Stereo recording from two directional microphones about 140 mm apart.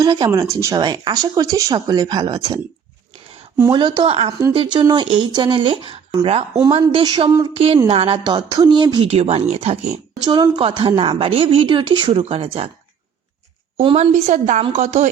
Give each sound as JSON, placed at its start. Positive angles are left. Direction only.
{"t": 0.0, "sound": "speech", "side_deg": -30}
{"t": 3.7, "sound": "a woman's voice", "side_deg": -30}
{"t": 7.0, "sound": "a woman's voice", "side_deg": -30}
{"t": 8.2, "sound": "speech", "side_deg": -30}
{"t": 10.2, "sound": "a woman's voice", "side_deg": -30}
{"t": 13.9, "sound": "a woman's voice", "side_deg": -50}